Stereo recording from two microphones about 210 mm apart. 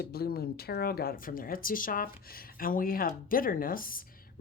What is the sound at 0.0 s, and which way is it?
Speech, 45° left (ahead or behind).